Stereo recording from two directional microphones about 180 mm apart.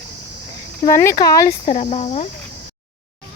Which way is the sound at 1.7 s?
40° left (ahead or behind).